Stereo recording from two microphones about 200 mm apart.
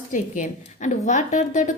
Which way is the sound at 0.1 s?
40° left (ahead or behind).